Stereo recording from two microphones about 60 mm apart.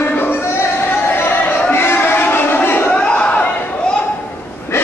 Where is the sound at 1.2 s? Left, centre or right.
Left.